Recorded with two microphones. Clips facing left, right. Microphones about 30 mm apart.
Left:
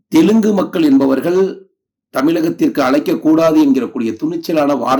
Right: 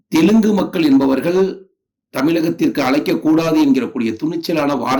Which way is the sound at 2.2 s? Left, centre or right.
Centre.